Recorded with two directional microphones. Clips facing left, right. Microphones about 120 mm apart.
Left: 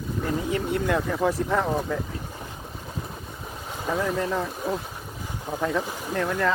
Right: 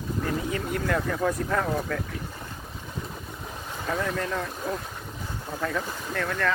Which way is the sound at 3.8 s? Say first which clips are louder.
Left 3 dB; 15° left (ahead or behind).